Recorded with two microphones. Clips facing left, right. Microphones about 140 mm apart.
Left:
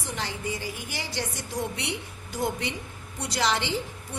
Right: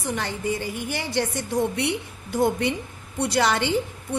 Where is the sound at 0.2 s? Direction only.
55° right (ahead or behind).